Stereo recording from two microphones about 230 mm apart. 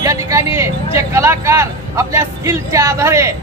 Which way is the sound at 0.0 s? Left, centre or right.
Centre.